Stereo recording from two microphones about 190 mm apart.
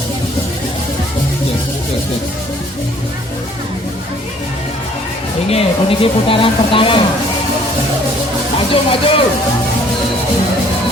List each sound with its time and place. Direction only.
5.5 s speech: 30° left (ahead or behind)
8.7 s speech: 30° left (ahead or behind)